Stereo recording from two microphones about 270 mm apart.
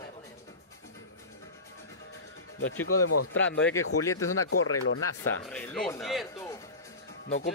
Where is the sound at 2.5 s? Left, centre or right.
Left.